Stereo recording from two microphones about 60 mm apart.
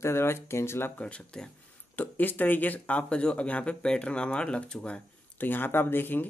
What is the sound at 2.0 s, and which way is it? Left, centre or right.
Speech, left.